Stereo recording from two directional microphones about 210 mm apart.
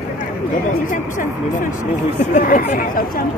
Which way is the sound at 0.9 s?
40° left (ahead or behind).